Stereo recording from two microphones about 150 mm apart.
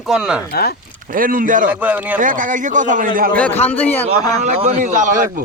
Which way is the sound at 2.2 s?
60° right (ahead or behind).